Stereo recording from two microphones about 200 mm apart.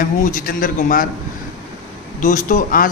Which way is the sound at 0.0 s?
40° left (ahead or behind).